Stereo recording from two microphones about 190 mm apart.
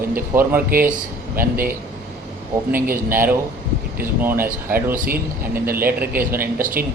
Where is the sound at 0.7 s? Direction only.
50° right (ahead or behind).